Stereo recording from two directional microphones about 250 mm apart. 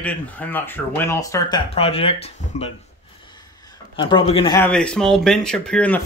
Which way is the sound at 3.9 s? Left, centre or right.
Centre.